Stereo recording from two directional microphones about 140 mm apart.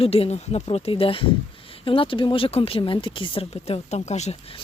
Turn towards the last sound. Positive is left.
turn(degrees=50)  # may be behind; listen again after turning